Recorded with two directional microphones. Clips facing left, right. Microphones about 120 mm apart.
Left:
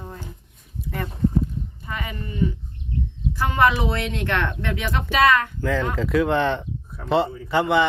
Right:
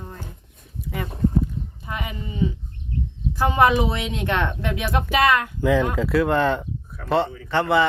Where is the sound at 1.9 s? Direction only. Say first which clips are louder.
Even; 15° right (ahead or behind).